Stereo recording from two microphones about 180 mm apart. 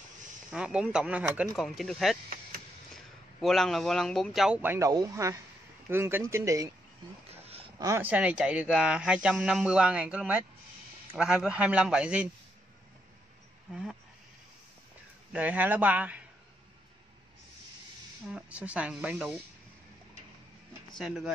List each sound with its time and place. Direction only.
0.5 s speech: 5° right (ahead or behind)
3.3 s speech: centre (ahead or behind)
4.6 s speech: 15° right (ahead or behind)
7.2 s a sound: 35° right (ahead or behind)
7.8 s speech: 15° right (ahead or behind)
15.3 s speech: 10° right (ahead or behind)
18.3 s speech: 5° right (ahead or behind)
21.0 s speech: centre (ahead or behind)